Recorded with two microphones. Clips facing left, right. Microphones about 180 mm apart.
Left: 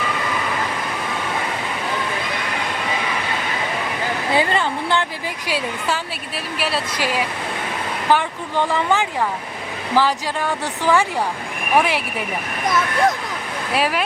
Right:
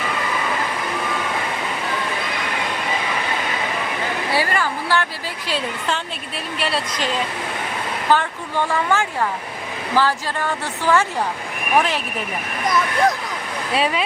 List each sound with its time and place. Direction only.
4.3 s speech: 20° left (ahead or behind)
5.5 s a woman's voice: 10° left (ahead or behind)
12.6 s speech: centre (ahead or behind)